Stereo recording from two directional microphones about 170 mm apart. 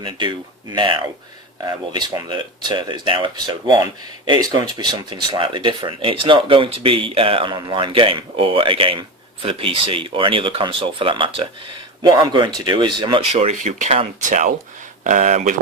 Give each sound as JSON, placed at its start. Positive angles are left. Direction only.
{"t": 0.0, "sound": "speech", "side_deg": -25}